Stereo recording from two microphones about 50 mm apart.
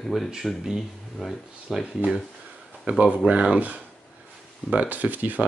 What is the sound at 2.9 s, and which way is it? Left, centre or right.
Speech, right.